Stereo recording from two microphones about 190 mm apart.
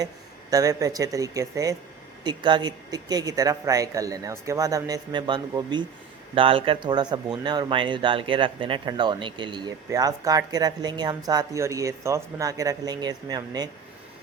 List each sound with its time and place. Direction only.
0.5 s speech: 15° right (ahead or behind)